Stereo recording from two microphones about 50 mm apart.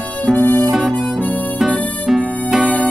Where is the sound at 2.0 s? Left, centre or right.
Centre.